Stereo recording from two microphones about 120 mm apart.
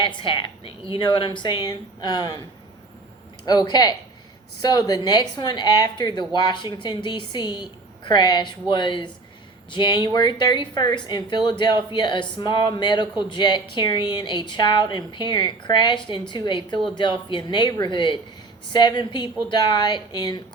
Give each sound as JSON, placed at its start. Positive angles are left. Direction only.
{"t": 0.0, "sound": "a woman's voice", "side_deg": 40}
{"t": 3.4, "sound": "a woman's voice", "side_deg": 35}